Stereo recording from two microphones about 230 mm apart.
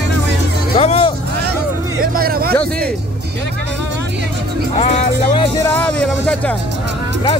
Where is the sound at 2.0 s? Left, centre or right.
Right.